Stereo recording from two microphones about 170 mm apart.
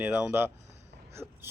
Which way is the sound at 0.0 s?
10° right (ahead or behind).